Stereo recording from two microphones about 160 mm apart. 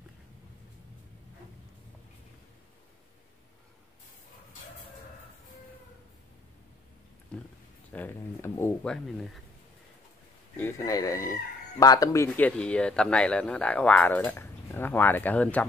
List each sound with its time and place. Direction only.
7.9 s a sound: 10° left (ahead or behind)
8.9 s speech: centre (ahead or behind)
10.6 s speech: 20° left (ahead or behind)